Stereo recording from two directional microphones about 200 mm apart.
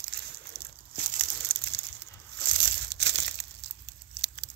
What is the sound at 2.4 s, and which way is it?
Crumpling, 55° right (ahead or behind).